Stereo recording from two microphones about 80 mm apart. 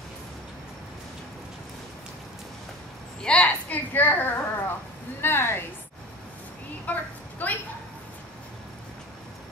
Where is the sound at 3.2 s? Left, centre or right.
Centre.